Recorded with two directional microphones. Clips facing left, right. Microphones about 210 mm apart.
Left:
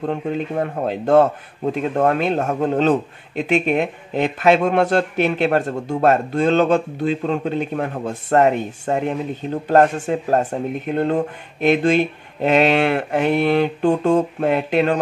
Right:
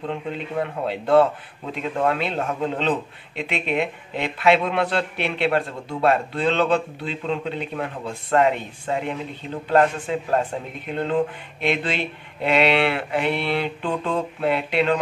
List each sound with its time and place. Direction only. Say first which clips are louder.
0.1 s a man's voice: left 4 dB; 45° left (ahead or behind)